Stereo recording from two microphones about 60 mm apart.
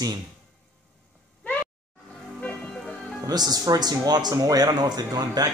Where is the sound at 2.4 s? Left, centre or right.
Centre.